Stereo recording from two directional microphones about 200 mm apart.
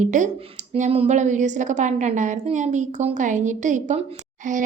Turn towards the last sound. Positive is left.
turn(degrees=-40)  # may be behind; listen again after turning